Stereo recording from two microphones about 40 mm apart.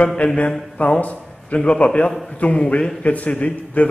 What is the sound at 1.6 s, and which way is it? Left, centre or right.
A man's voice, left.